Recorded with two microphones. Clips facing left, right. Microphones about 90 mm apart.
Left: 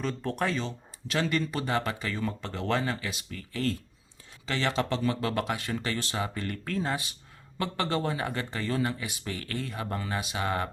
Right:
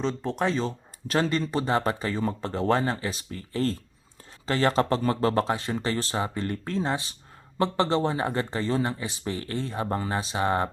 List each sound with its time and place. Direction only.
0.0 s speech: 20° right (ahead or behind)
0.5 s speech: 40° right (ahead or behind)